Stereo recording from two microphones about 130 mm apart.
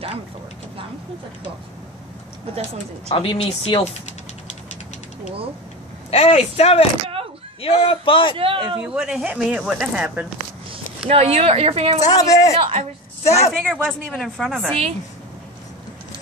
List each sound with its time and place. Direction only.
3.1 s speech: 45° left (ahead or behind)
6.0 s a man's voice: 50° left (ahead or behind)
8.4 s speech: 40° right (ahead or behind)
8.8 s speech: 10° right (ahead or behind)
11.1 s speech: 45° right (ahead or behind)
12.1 s speech: 25° left (ahead or behind)
13.2 s speech: 55° left (ahead or behind)
13.5 s a woman's voice: centre (ahead or behind)